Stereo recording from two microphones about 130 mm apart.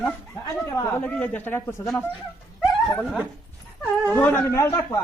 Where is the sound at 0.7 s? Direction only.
25° left (ahead or behind).